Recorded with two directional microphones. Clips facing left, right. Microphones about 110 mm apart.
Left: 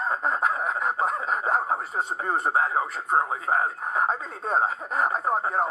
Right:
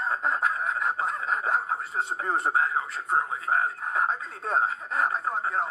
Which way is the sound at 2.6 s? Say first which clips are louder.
Left 3 dB; 35° left (ahead or behind).